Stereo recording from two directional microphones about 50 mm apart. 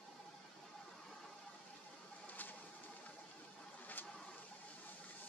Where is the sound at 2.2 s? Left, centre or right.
Left.